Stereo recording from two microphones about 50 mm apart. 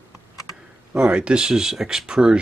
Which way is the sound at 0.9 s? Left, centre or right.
Right.